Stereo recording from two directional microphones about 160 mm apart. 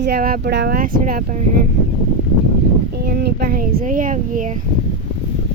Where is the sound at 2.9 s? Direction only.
80° right; by 4.6 s 55° right (ahead or behind).